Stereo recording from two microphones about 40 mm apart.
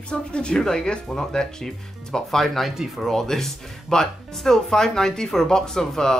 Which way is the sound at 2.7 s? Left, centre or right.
Centre.